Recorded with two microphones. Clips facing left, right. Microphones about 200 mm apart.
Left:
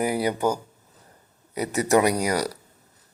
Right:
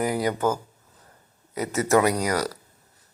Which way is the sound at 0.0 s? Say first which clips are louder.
Even; 10° left (ahead or behind).